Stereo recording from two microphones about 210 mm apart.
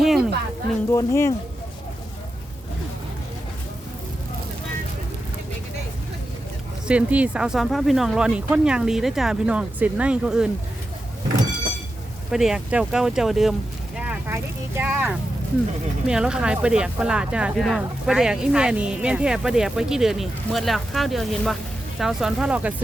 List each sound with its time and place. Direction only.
0.0 s a sound: centre (ahead or behind)
0.9 s speech: 15° left (ahead or behind)
6.8 s speech: 5° right (ahead or behind)
12.3 s speech: centre (ahead or behind)